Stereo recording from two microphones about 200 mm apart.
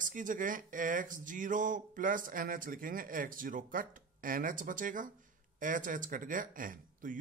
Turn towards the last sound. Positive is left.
turn(degrees=-40)  # may be behind; listen again after turning